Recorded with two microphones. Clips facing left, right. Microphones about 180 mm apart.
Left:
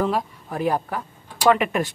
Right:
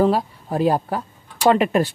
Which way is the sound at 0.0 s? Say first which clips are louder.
Right 5 dB; 30° right (ahead or behind).